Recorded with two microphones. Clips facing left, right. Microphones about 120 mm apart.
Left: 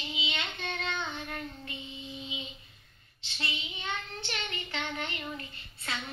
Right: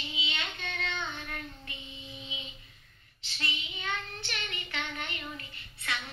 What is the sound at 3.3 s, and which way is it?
Child singing, 25° left (ahead or behind).